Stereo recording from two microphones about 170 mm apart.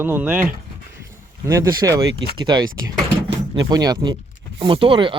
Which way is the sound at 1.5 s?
20° right (ahead or behind).